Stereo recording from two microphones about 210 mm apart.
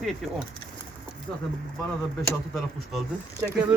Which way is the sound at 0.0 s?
Centre (ahead or behind).